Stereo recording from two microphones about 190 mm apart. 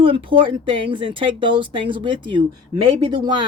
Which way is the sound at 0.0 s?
25° right (ahead or behind).